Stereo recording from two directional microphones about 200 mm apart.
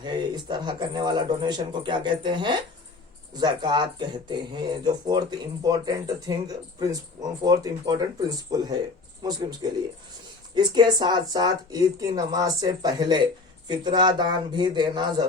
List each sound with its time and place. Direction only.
0.0 s speech: 20° right (ahead or behind)